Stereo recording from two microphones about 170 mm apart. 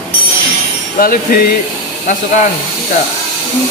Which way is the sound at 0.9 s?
55° left (ahead or behind).